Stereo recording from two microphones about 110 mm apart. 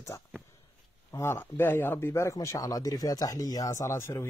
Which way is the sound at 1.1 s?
25° left (ahead or behind).